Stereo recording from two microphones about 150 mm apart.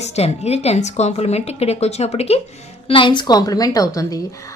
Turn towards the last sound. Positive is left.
turn(degrees=20)  # may be behind; listen again after turning